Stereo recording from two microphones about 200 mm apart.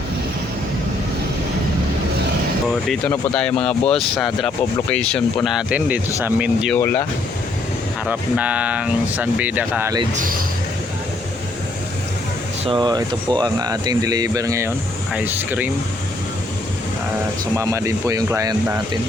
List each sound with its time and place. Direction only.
2.9 s speech: 5° left (ahead or behind)
6.7 s speech: 10° left (ahead or behind)
8.0 s speech: 5° right (ahead or behind)
10.2 s speech: 45° right (ahead or behind)
12.6 s speech: 20° right (ahead or behind)
17.6 s speech: 15° right (ahead or behind)